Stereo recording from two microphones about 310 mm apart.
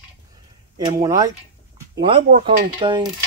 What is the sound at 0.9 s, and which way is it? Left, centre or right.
Speech, centre.